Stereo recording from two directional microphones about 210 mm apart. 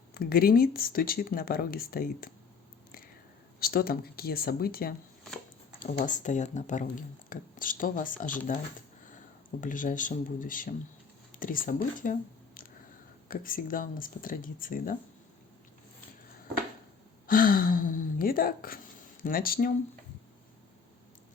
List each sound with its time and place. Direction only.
0.1 s speech: 45° left (ahead or behind)
3.6 s speech: 45° left (ahead or behind)
9.6 s speech: 40° left (ahead or behind)
13.2 s speech: 40° left (ahead or behind)
17.2 s speech: 45° left (ahead or behind)